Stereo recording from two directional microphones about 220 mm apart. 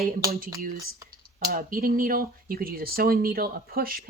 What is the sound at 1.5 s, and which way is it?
Speech, 40° right (ahead or behind).